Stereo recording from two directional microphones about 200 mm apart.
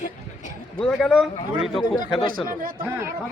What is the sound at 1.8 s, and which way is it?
Speech, 20° left (ahead or behind).